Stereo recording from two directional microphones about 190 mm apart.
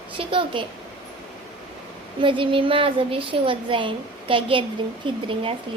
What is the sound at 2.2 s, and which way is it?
A woman's voice, 25° right (ahead or behind).